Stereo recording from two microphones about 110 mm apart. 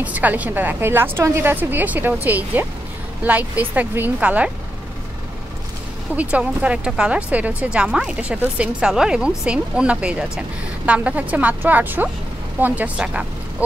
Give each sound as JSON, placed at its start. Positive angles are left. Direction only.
{"t": 0.0, "sound": "a woman's voice", "side_deg": -15}
{"t": 6.1, "sound": "a woman's voice", "side_deg": -10}